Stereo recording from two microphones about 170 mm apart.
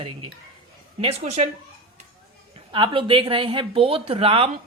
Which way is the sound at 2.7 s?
30° right (ahead or behind).